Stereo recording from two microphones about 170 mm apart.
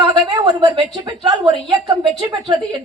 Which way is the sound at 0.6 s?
25° right (ahead or behind).